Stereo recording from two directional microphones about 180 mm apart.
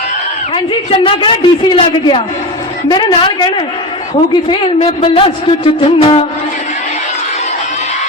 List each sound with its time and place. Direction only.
0.5 s a man's voice: 30° left (ahead or behind)